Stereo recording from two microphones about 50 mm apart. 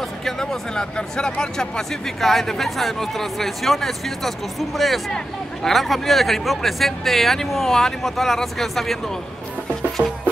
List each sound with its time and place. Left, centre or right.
0.2 s speech: centre
10.0 s music: right